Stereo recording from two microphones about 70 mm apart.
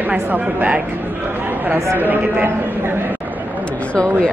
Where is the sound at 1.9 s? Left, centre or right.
Right.